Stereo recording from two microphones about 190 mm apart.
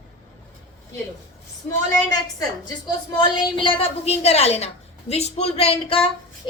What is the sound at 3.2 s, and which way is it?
A woman's voice, 25° left (ahead or behind).